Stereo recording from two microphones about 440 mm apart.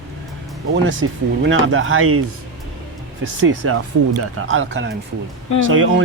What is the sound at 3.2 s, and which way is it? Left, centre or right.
Speech, right.